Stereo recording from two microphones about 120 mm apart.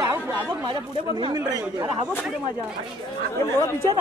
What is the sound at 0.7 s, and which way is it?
Speech, 40° right (ahead or behind).